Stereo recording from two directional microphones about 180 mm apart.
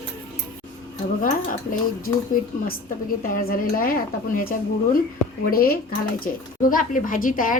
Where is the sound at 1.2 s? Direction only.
50° left (ahead or behind).